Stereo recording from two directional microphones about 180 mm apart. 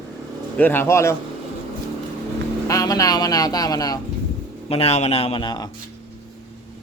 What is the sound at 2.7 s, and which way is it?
Speech, 20° left (ahead or behind).